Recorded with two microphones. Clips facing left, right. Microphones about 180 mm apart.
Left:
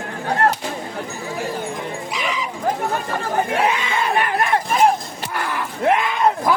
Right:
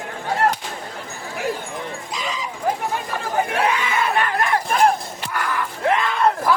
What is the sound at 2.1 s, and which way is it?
Dog, 70° left (ahead or behind).